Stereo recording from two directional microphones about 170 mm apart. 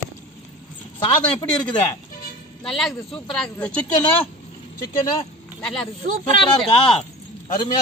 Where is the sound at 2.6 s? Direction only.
Centre (ahead or behind).